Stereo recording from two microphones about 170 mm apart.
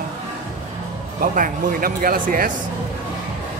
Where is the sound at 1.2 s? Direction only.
55° right (ahead or behind).